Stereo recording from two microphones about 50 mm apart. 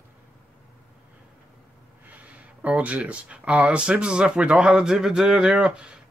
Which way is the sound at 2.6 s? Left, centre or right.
Right.